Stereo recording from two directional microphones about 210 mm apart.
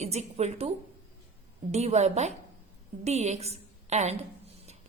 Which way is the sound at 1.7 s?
30° right (ahead or behind).